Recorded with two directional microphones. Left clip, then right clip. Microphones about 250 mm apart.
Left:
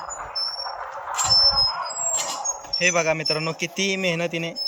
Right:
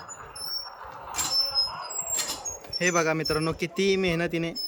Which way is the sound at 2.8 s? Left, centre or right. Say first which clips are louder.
Left 3 dB; centre.